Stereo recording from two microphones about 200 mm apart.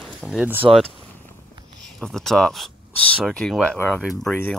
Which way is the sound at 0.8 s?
5° left (ahead or behind).